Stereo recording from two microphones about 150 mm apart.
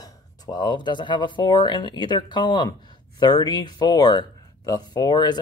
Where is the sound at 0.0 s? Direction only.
25° left (ahead or behind).